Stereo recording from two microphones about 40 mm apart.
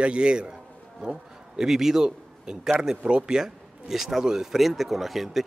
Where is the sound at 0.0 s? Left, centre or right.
Right.